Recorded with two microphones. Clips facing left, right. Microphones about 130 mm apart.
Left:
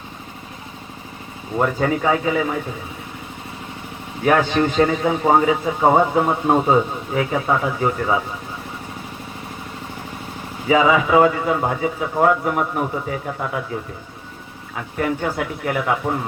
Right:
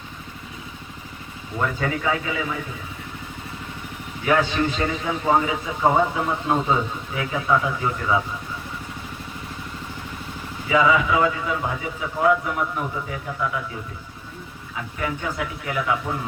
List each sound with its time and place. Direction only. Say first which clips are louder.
1.5 s speech: left 6 dB; 40° left (ahead or behind)
4.2 s a man's voice: left 4 dB; 50° left (ahead or behind)
10.7 s a man's voice: left 4 dB; 45° left (ahead or behind)
14.9 s a man's voice: left 6 dB; 45° left (ahead or behind)